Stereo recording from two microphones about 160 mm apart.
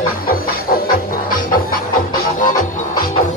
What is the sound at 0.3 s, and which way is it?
Music, 65° left (ahead or behind).